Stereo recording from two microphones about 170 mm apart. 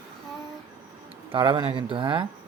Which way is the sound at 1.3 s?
30° right (ahead or behind).